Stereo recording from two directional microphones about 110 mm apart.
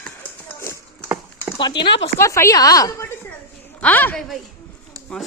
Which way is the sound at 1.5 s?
45° left (ahead or behind).